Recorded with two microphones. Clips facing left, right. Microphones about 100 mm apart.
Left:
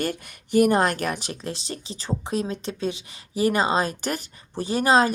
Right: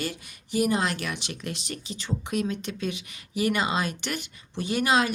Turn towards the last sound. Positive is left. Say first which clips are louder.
# left 4 dB
turn(degrees=35)  # may be behind; listen again after turning